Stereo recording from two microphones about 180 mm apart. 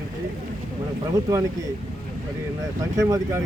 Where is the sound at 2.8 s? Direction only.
15° right (ahead or behind).